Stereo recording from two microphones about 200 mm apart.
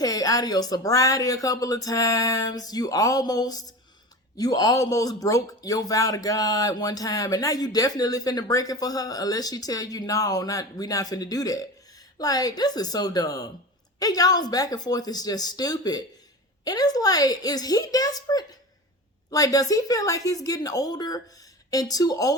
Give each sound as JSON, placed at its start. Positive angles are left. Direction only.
{"t": 0.0, "sound": "speech", "side_deg": 20}